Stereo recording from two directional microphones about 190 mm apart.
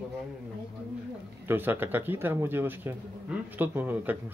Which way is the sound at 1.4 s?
10° right (ahead or behind).